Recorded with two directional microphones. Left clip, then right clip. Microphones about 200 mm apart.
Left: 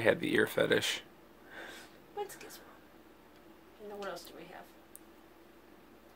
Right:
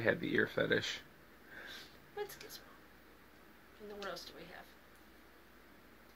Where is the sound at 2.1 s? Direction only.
5° left (ahead or behind).